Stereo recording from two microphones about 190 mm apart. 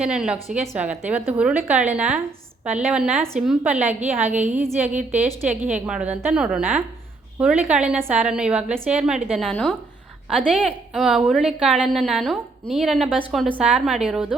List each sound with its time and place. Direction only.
0.0 s a woman's voice: 5° right (ahead or behind)